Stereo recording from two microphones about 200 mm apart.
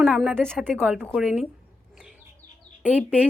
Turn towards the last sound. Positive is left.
turn(degrees=-5)  # may be behind; listen again after turning